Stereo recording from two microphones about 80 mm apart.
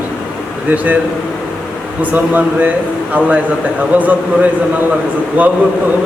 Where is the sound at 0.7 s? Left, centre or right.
Centre.